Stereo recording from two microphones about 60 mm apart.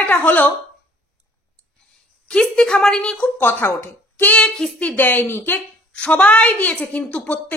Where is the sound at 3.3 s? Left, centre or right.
Left.